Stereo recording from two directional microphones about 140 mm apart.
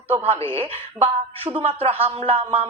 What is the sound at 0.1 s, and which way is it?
Speech, 45° right (ahead or behind).